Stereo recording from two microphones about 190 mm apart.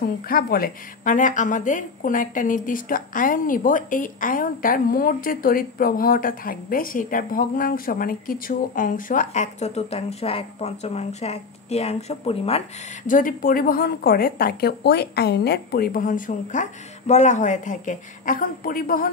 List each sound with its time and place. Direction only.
0.0 s a woman's voice: 50° left (ahead or behind); by 13.1 s 30° left (ahead or behind)
13.1 s a woman's voice: 45° left (ahead or behind)